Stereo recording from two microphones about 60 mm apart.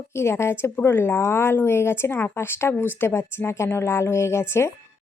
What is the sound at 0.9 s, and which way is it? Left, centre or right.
Speech, left.